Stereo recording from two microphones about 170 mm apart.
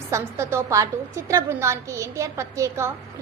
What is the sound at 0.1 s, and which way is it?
A woman's voice, 15° right (ahead or behind).